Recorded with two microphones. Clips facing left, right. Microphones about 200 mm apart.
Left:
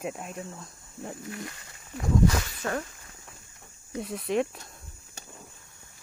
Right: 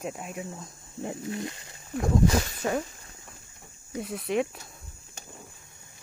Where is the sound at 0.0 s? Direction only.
Centre (ahead or behind).